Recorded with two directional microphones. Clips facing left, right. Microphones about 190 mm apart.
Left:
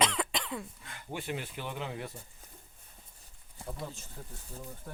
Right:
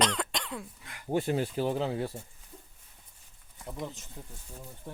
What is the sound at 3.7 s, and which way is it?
Speech, 20° right (ahead or behind).